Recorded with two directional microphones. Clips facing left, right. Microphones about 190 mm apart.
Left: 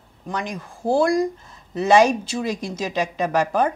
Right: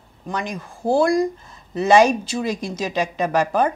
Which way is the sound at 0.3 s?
15° right (ahead or behind).